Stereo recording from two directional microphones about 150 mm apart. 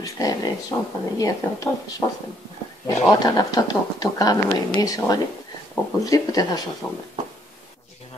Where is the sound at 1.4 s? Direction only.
15° left (ahead or behind).